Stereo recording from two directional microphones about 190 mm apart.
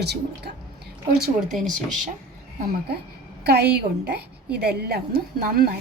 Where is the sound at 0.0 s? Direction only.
60° right (ahead or behind).